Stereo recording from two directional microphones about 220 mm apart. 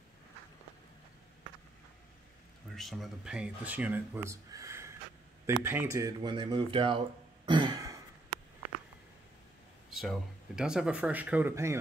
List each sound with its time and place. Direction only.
2.7 s speech: centre (ahead or behind); by 7.0 s 25° right (ahead or behind)
7.4 s throat clearing: 20° right (ahead or behind)
9.8 s speech: centre (ahead or behind)